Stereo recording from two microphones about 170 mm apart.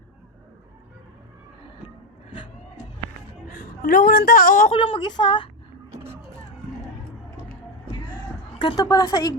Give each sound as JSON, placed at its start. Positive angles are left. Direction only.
{"t": 3.5, "sound": "a woman's voice", "side_deg": 50}
{"t": 4.7, "sound": "a woman's voice", "side_deg": 30}
{"t": 5.9, "sound": "a sound", "side_deg": -15}
{"t": 8.6, "sound": "a woman's voice", "side_deg": 25}